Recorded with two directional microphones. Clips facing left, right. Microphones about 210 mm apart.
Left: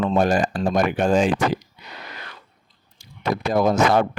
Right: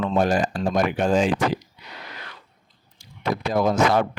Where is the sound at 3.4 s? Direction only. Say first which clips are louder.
Left 2 dB; 45° left (ahead or behind).